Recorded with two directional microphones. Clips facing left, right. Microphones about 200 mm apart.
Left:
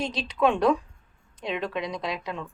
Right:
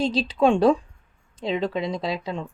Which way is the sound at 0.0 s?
30° right (ahead or behind).